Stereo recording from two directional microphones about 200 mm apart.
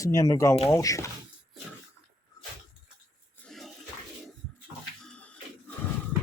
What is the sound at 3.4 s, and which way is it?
Toilet flush, centre (ahead or behind).